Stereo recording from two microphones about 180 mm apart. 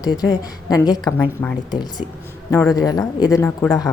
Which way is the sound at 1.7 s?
25° left (ahead or behind).